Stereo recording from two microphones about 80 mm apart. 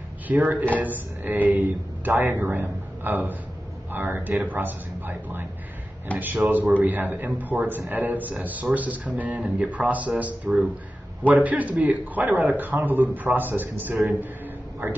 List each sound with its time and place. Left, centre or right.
0.3 s a man's voice: centre